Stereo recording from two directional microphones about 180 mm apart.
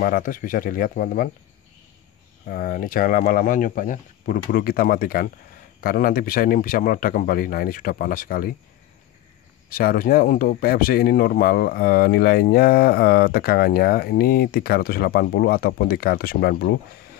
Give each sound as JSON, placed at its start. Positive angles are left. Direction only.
{"t": 0.0, "sound": "speech", "side_deg": 50}
{"t": 2.4, "sound": "speech", "side_deg": 55}
{"t": 9.7, "sound": "speech", "side_deg": 55}